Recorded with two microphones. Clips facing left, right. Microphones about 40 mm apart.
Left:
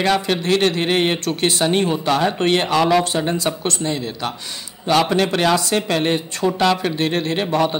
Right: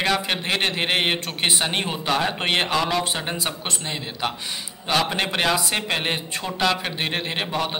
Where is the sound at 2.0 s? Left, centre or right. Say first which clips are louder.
Left 2 dB; centre.